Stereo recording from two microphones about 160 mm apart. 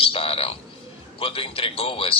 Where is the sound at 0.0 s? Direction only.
35° left (ahead or behind).